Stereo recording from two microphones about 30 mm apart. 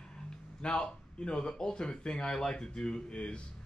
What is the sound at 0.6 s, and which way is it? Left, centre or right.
A man's voice, left.